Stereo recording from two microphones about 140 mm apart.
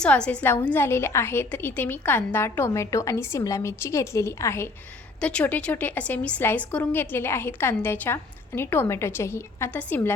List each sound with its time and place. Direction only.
0.0 s a woman's voice: 10° left (ahead or behind)
5.2 s a woman's voice: 10° left (ahead or behind)